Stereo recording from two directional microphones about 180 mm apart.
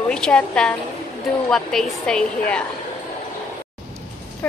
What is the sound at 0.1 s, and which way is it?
A woman's voice, 5° left (ahead or behind).